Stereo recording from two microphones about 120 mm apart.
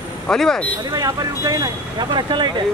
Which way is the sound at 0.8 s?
30° right (ahead or behind).